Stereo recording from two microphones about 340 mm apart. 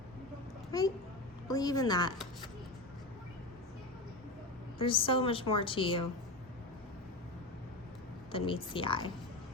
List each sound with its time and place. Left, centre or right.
0.7 s a child's voice: centre
4.8 s a woman's voice: centre
8.3 s a woman's voice: centre